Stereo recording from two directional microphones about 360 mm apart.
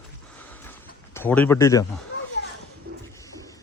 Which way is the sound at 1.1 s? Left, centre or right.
Centre.